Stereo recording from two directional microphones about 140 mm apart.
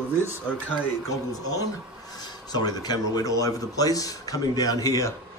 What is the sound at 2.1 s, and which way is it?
A man's voice, 30° left (ahead or behind).